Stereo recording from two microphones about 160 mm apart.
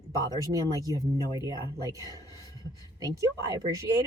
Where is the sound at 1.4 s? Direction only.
20° right (ahead or behind).